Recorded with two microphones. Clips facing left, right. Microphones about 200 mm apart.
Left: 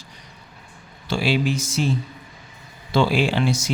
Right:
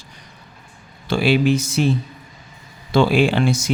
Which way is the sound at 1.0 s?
55° right (ahead or behind).